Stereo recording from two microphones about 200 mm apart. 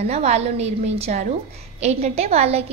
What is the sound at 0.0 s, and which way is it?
A woman's voice, 35° right (ahead or behind).